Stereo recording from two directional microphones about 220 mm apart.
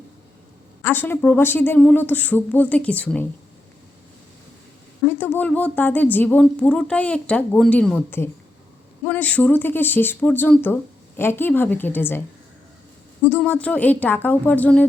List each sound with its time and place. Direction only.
0.8 s speech: 10° left (ahead or behind)
5.0 s speech: 10° left (ahead or behind)
13.2 s speech: 10° left (ahead or behind)